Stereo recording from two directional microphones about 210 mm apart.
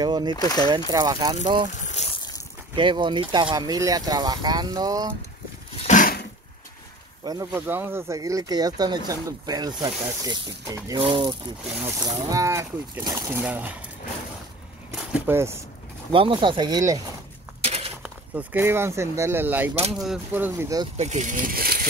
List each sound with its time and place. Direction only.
0.0 s speech: 20° right (ahead or behind)
0.4 s speech: 20° left (ahead or behind)
0.7 s speech: 20° right (ahead or behind)
1.7 s a sound: 35° left (ahead or behind)
2.7 s speech: 20° right (ahead or behind)
5.9 s a sound: 40° left (ahead or behind)
7.2 s speech: 15° right (ahead or behind)
15.1 s speech: 10° right (ahead or behind)
16.1 s speech: 25° right (ahead or behind)
17.6 s a sound: 30° right (ahead or behind)
18.0 s speech: 5° right (ahead or behind)
21.0 s speech: 35° right (ahead or behind)